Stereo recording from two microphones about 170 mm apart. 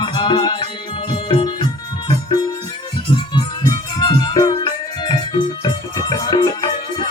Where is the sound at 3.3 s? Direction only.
25° left (ahead or behind).